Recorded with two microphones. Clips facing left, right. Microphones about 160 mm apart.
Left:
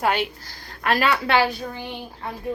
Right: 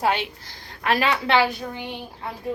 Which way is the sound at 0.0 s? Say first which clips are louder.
Left 1 dB; 25° right (ahead or behind).